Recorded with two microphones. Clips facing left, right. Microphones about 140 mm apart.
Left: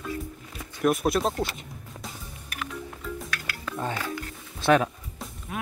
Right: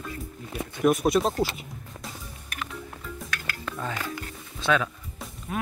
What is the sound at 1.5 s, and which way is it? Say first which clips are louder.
Music: right 1 dB; centre (ahead or behind).